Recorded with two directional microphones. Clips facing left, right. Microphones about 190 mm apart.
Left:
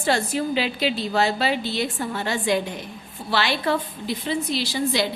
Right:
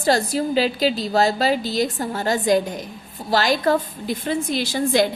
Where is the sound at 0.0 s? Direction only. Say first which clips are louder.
Right 3 dB; 35° right (ahead or behind).